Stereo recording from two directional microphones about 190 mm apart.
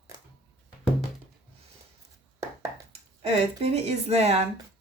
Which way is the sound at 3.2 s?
35° right (ahead or behind).